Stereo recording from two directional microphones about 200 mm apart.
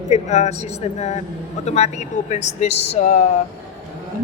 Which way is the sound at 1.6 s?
35° left (ahead or behind).